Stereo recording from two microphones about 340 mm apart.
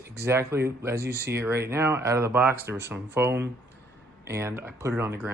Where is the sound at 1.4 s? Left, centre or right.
Centre.